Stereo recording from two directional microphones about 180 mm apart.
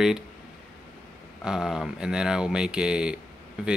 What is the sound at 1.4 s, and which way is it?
Speech, 5° right (ahead or behind).